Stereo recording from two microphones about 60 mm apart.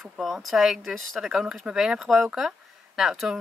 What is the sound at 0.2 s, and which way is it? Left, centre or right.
A woman's voice, centre.